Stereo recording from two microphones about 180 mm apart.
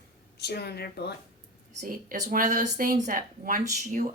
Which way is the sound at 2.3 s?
45° right (ahead or behind).